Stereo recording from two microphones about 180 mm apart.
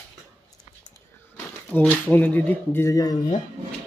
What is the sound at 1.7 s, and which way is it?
Speech, 10° left (ahead or behind).